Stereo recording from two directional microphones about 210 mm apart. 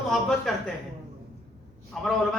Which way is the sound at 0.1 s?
Centre (ahead or behind).